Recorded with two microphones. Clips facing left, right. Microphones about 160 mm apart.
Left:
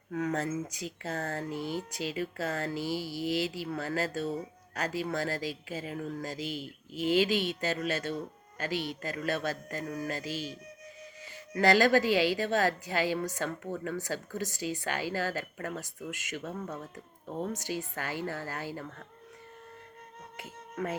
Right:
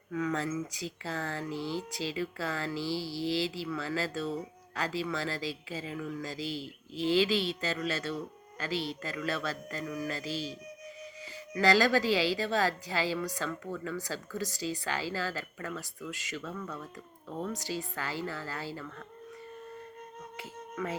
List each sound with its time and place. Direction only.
0.1 s speech: 50° left (ahead or behind)
2.9 s mantra: 35° right (ahead or behind)
3.5 s speech: 50° left (ahead or behind)
11.5 s speech: 50° left (ahead or behind)